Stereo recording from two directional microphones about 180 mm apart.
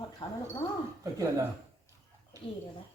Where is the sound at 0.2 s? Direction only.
25° left (ahead or behind).